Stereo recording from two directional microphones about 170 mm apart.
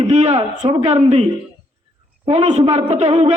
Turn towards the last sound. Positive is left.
turn(degrees=-40)  # may be behind; listen again after turning